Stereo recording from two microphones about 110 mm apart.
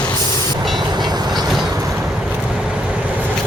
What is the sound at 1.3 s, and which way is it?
Train, centre (ahead or behind).